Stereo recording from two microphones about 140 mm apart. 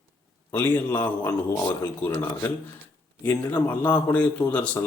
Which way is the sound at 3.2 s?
15° left (ahead or behind).